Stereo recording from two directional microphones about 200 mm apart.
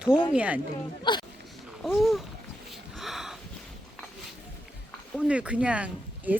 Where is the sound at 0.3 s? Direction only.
5° right (ahead or behind).